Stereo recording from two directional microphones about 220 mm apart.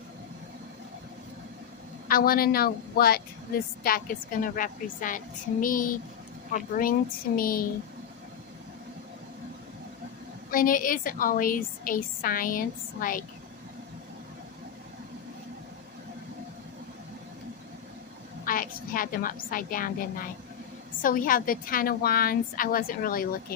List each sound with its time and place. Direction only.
2.0 s a woman's voice: 40° left (ahead or behind)
7.3 s a woman's voice: 40° left (ahead or behind)
10.5 s a woman's voice: 40° left (ahead or behind)
18.4 s a woman's voice: 40° left (ahead or behind)